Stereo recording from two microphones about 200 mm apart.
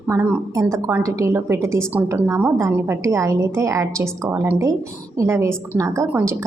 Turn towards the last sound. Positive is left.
turn(degrees=-10)  # may be behind; listen again after turning